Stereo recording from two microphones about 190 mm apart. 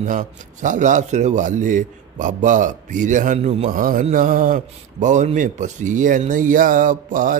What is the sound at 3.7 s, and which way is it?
A man's voice, 45° right (ahead or behind).